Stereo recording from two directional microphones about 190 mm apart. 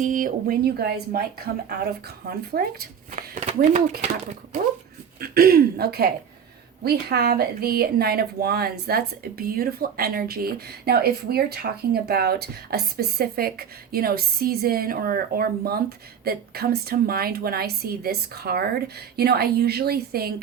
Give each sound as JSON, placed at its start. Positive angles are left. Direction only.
{"t": 0.0, "sound": "speech", "side_deg": -45}
{"t": 3.1, "sound": "speech", "side_deg": -40}
{"t": 5.2, "sound": "speech", "side_deg": -55}